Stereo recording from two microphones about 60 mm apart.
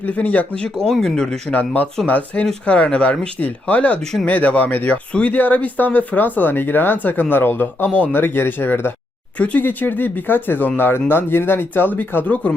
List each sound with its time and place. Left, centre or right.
0.0 s speech: left
1.5 s speech: left
9.4 s speech: left